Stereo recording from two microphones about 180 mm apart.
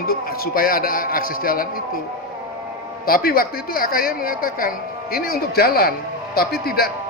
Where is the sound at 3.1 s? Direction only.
55° left (ahead or behind).